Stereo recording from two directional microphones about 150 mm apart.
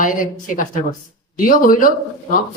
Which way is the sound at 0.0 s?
60° left (ahead or behind).